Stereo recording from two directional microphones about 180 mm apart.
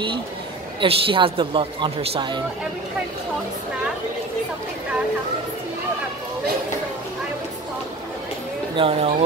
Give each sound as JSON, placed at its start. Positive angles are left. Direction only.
{"t": 0.7, "sound": "a woman's voice", "side_deg": -30}
{"t": 8.7, "sound": "speech", "side_deg": -30}